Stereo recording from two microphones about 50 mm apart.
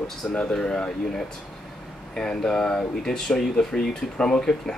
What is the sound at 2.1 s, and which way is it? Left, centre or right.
Speech, centre.